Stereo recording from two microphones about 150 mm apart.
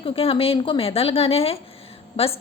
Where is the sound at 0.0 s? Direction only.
40° left (ahead or behind).